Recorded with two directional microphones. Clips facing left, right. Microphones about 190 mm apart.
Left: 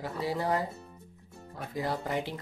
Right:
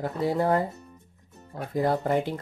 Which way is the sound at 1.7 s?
50° right (ahead or behind).